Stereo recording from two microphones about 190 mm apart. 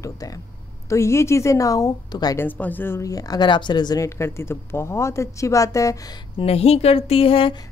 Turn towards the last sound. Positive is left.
turn(degrees=30)  # may be behind; listen again after turning